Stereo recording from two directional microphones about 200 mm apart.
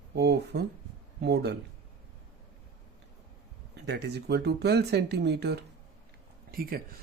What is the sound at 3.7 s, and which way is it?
Speech, 55° right (ahead or behind).